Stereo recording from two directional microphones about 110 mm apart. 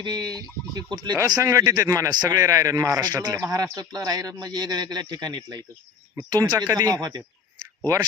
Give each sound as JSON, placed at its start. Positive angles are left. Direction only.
{"t": 0.0, "sound": "speech", "side_deg": -40}